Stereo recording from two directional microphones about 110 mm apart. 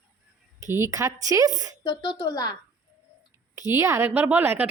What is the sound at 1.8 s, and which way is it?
Speech, 45° left (ahead or behind).